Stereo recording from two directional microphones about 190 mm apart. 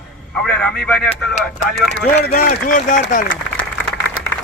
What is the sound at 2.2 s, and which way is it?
Speech, 50° left (ahead or behind).